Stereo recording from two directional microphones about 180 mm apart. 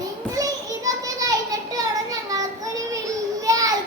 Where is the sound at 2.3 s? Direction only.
20° right (ahead or behind).